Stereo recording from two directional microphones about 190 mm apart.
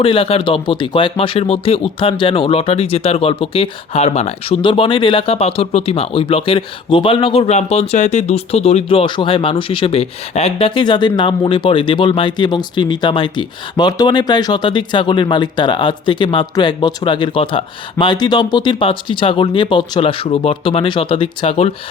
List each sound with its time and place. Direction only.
0.0 s speech: 30° left (ahead or behind)